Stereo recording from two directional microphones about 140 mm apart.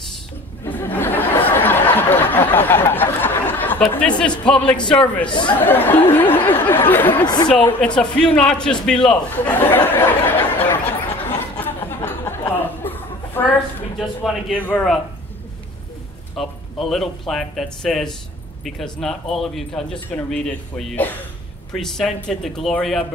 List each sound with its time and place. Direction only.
0.7 s a sound: 15° left (ahead or behind)
4.5 s speech: 5° left (ahead or behind)
5.3 s speech: 35° left (ahead or behind)
5.6 s speech: 15° left (ahead or behind)
8.8 s a sound: 5° left (ahead or behind)
13.9 s speech: centre (ahead or behind)
16.3 s a man's voice: centre (ahead or behind)